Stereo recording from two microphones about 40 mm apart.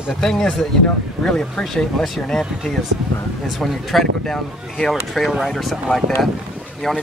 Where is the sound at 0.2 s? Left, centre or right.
Centre.